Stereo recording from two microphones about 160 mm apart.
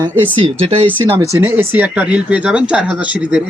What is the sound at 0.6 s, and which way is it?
Speech, 40° right (ahead or behind).